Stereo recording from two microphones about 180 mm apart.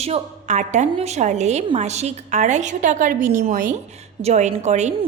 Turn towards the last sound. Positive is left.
turn(degrees=-40)  # may be behind; listen again after turning